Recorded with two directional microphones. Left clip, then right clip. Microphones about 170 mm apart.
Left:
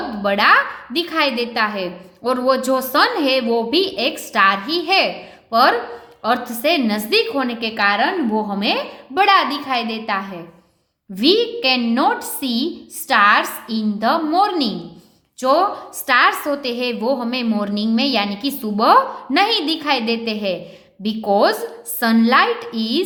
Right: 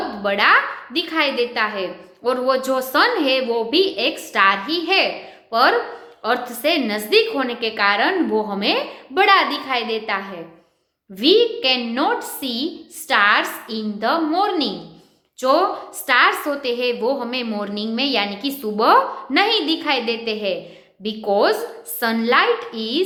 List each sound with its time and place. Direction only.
0.2 s a woman's voice: 35° left (ahead or behind)